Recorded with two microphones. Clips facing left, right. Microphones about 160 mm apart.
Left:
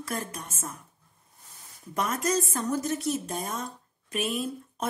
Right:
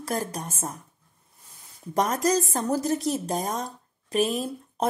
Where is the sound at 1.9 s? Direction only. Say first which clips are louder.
Right 4 dB; 35° right (ahead or behind).